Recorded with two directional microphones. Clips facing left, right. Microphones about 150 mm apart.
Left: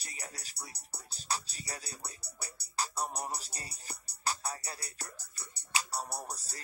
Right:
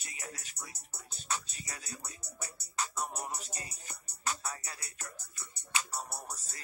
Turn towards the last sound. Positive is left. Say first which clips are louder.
# left 3 dB
turn(degrees=35)  # may be behind; listen again after turning